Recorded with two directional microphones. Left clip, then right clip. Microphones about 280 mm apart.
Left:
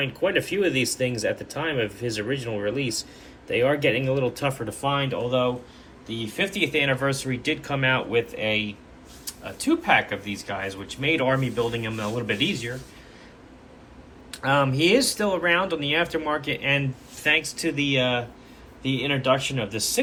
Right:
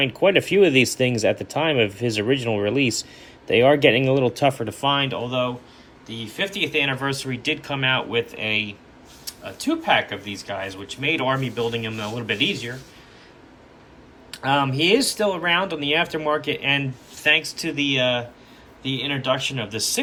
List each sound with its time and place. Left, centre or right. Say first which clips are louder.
0.0 s speech: right 6 dB; centre
14.3 s speech: right 1 dB; centre